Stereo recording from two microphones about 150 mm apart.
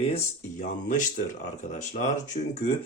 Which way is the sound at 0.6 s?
60° left (ahead or behind).